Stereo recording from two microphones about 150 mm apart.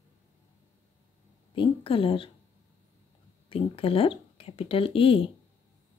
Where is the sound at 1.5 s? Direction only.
35° left (ahead or behind).